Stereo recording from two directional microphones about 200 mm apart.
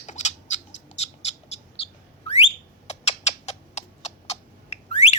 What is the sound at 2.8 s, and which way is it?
Cat, 35° left (ahead or behind).